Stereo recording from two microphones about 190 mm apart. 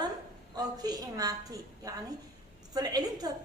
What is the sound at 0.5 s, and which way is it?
A woman's voice, 20° right (ahead or behind).